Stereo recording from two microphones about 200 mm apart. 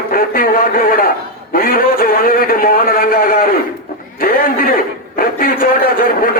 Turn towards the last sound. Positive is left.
turn(degrees=45)  # may be behind; listen again after turning